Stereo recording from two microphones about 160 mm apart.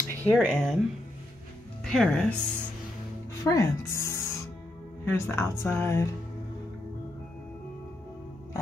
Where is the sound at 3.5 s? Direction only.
20° left (ahead or behind).